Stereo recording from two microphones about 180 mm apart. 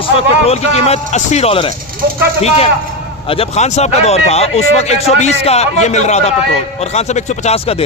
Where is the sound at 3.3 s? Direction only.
35° left (ahead or behind).